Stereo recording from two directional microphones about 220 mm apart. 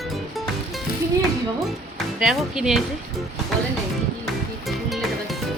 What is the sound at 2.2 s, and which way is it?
Speech, centre (ahead or behind).